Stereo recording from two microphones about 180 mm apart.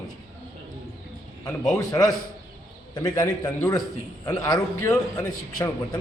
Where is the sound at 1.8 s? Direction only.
20° left (ahead or behind).